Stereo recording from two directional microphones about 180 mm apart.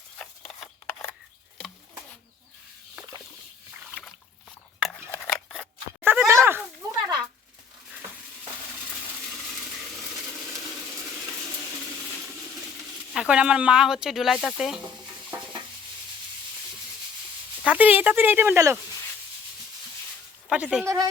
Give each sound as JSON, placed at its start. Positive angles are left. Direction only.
{"t": 0.2, "sound": "scissors", "side_deg": 5}
{"t": 4.8, "sound": "cutlery", "side_deg": 0}
{"t": 6.0, "sound": "a sound", "side_deg": -10}
{"t": 13.1, "sound": "speech", "side_deg": -5}
{"t": 17.6, "sound": "speech", "side_deg": -10}
{"t": 20.5, "sound": "speech", "side_deg": -5}
{"t": 20.8, "sound": "speech", "side_deg": -15}